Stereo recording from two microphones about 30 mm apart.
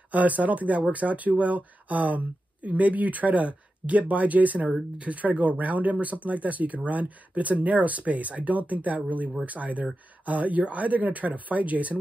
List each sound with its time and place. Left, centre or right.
0.1 s speech: right
4.9 s speech: right